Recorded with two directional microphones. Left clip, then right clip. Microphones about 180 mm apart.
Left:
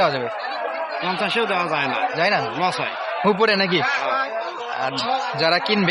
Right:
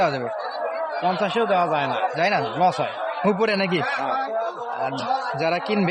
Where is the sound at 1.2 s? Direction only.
50° right (ahead or behind).